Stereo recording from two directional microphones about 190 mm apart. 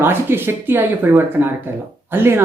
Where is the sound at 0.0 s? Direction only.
10° right (ahead or behind).